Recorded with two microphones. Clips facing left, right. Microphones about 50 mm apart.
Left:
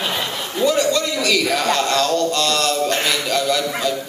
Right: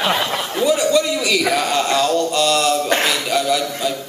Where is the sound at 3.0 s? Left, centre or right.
Centre.